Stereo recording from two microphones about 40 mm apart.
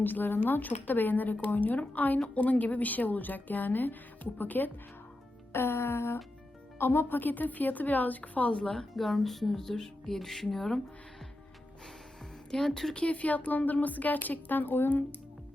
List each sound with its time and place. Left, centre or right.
0.0 s a woman's voice: left
5.5 s music: left
6.7 s speech: left
7.2 s a woman's voice: left
9.0 s speech: centre
12.5 s speech: centre
12.9 s a woman's voice: left